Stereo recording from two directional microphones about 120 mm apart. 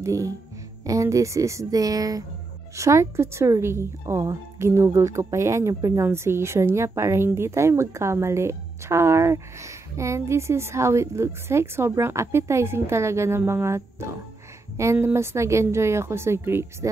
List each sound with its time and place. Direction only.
0.0 s speech: 25° right (ahead or behind)